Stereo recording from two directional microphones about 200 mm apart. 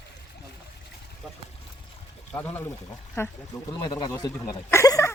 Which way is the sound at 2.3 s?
10° left (ahead or behind).